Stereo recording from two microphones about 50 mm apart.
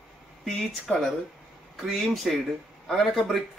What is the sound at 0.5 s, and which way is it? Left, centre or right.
Speech, centre.